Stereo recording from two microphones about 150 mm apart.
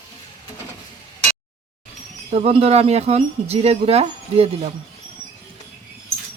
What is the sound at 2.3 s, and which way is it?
Speech, 40° right (ahead or behind).